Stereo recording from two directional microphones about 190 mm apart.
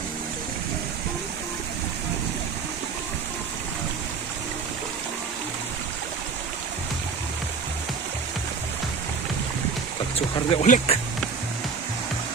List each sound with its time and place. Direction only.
10.2 s speech: 35° left (ahead or behind)